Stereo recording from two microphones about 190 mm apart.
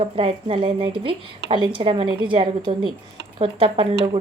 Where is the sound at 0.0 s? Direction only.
30° right (ahead or behind).